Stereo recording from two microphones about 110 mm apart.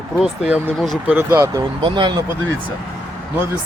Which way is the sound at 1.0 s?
15° right (ahead or behind).